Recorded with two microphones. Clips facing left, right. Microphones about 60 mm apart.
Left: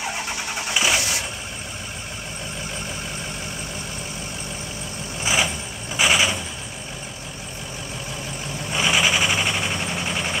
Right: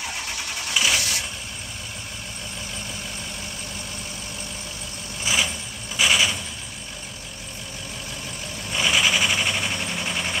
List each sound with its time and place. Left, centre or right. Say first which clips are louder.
0.7 s vehicle: left 1 dB; centre
5.2 s vehicle: left 2 dB; left
8.7 s vehicle: left 1 dB; centre